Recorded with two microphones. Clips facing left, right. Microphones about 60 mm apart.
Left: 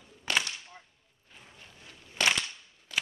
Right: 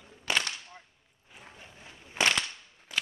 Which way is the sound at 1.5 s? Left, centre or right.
Right.